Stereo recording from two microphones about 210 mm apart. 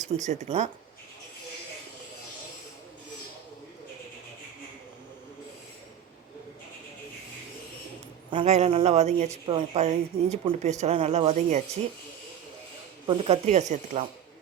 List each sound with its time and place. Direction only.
0.0 s speech: 35° right (ahead or behind)
8.3 s speech: 30° right (ahead or behind)
13.1 s speech: 30° right (ahead or behind)